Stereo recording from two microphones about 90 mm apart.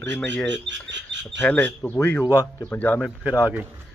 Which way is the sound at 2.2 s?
45° left (ahead or behind).